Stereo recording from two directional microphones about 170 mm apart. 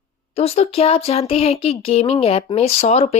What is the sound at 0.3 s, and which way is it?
Speech, 35° left (ahead or behind).